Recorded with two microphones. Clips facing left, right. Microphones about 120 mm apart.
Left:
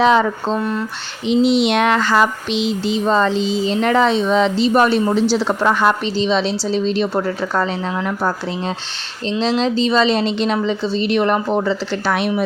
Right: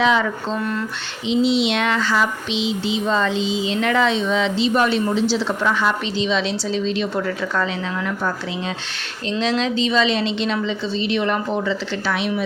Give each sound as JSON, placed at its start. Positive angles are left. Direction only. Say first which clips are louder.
{"t": 0.0, "sound": "a woman's voice", "louder": "left 4 dB", "side_deg": 40}
{"t": 0.6, "sound": "speech", "louder": "left 3 dB", "side_deg": 20}
{"t": 1.3, "sound": "a sound", "louder": "left 4 dB", "side_deg": 55}
{"t": 6.2, "sound": "a woman's voice", "louder": "left 4 dB", "side_deg": 35}
{"t": 9.4, "sound": "a woman's voice", "louder": "left 3 dB", "side_deg": 35}